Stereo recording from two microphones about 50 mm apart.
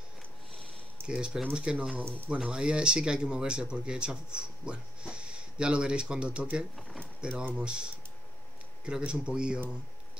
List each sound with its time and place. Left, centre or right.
1.0 s speech: centre
6.7 s speech: centre
7.2 s speech: centre